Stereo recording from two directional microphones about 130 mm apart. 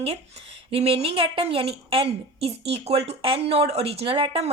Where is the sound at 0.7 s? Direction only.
50° right (ahead or behind).